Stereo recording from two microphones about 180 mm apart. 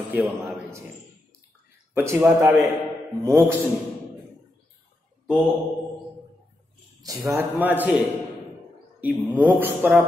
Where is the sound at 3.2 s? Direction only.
15° right (ahead or behind).